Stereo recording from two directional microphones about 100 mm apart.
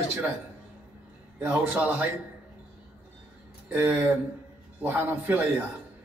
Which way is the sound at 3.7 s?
15° right (ahead or behind).